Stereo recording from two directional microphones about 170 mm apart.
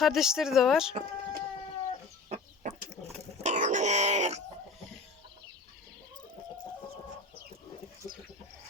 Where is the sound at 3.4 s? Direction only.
45° right (ahead or behind).